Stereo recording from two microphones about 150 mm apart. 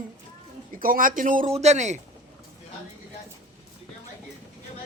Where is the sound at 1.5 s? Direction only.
45° right (ahead or behind).